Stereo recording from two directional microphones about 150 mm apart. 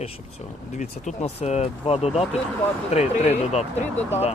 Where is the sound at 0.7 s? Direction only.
55° left (ahead or behind).